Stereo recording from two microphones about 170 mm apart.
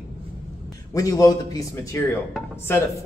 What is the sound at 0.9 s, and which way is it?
A man's voice, 20° left (ahead or behind).